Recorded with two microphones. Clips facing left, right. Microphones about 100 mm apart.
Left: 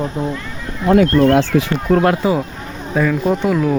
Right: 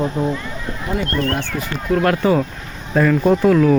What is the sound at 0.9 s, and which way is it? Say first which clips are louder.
Speech: left 10 dB; 90° left.